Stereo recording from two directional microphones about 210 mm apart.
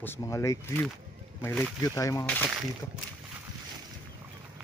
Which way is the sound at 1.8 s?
15° left (ahead or behind).